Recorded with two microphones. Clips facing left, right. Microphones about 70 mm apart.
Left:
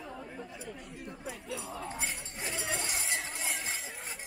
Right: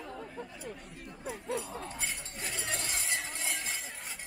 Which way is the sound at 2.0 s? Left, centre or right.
Centre.